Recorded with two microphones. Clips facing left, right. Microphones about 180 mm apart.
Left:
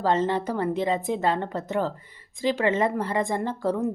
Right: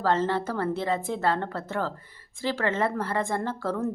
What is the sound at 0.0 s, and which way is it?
A woman's voice, 15° left (ahead or behind).